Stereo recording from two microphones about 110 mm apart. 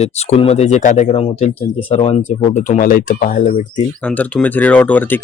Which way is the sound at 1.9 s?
70° left (ahead or behind).